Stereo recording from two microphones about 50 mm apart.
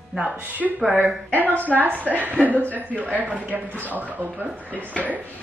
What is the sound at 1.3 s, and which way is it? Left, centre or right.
Speech, right.